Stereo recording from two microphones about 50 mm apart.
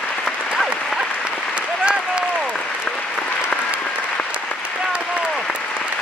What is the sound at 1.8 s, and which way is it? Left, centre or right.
Applause, centre.